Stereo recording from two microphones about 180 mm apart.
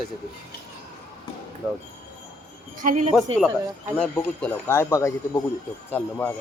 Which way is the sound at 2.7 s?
45° right (ahead or behind).